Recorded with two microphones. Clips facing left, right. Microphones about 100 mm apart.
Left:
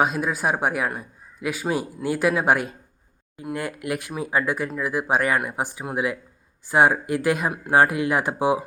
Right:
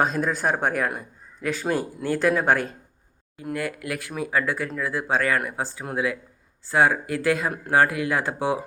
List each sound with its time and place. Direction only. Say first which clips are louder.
0.0 s speech: left 1 dB; 10° left (ahead or behind)
3.5 s speech: left 1 dB; 20° left (ahead or behind)